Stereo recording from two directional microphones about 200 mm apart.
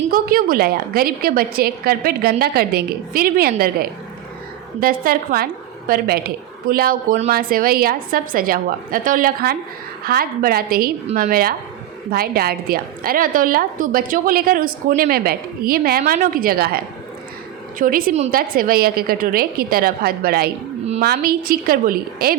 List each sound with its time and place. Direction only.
0.1 s a woman's voice: 45° right (ahead or behind)
4.8 s a woman's voice: 45° right (ahead or behind)